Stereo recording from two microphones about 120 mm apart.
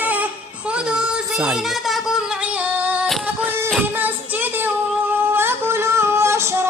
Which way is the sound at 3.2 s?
15° right (ahead or behind).